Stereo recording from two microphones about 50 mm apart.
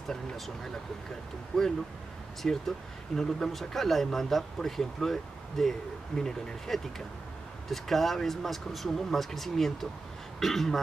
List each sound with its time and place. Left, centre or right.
1.5 s speech: centre